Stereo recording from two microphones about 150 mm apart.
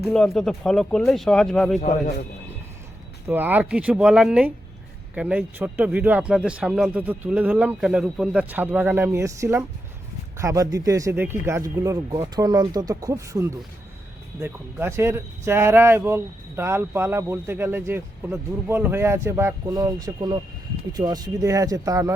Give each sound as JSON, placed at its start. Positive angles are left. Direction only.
{"t": 0.0, "sound": "speech", "side_deg": 0}
{"t": 3.2, "sound": "speech", "side_deg": -10}